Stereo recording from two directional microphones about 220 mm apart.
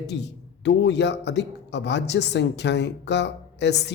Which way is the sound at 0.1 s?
50° left (ahead or behind).